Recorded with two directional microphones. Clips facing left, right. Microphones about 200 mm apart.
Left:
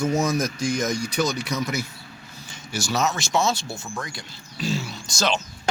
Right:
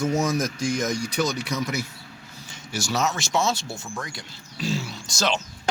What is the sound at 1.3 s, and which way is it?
Speech, 40° left (ahead or behind).